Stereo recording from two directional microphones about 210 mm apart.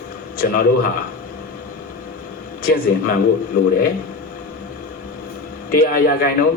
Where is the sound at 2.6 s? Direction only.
45° left (ahead or behind).